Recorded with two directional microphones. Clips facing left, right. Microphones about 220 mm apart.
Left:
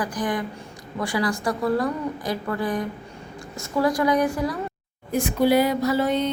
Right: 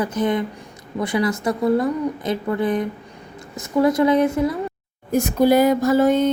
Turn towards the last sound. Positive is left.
turn(degrees=-45)  # may be behind; listen again after turning